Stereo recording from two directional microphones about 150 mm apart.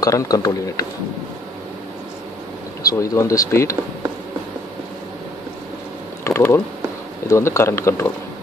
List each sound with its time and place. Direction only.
0.0 s speech: 25° left (ahead or behind)
2.9 s speech: 20° left (ahead or behind)
6.2 s typing: 15° left (ahead or behind)
7.2 s speech: 20° left (ahead or behind)